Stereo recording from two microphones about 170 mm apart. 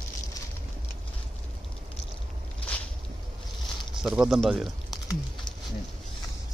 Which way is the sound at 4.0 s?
5° right (ahead or behind).